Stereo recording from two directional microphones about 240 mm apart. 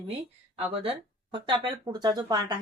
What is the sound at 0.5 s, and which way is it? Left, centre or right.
Speech, right.